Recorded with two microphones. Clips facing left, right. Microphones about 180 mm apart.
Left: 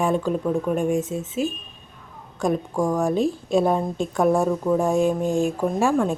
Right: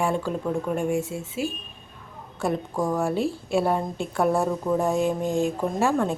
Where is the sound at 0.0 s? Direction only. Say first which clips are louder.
Left 3 dB; 15° left (ahead or behind).